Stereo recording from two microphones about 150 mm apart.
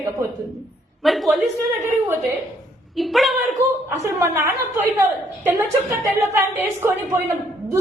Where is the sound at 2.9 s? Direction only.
Centre (ahead or behind).